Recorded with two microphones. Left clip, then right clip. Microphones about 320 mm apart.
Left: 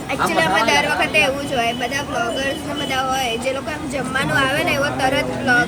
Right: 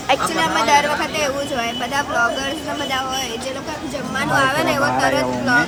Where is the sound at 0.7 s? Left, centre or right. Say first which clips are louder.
Right 1 dB; centre.